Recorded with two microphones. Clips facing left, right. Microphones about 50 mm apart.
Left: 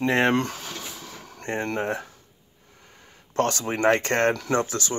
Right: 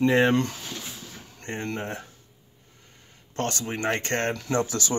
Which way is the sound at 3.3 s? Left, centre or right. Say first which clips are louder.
Left 5 dB; left.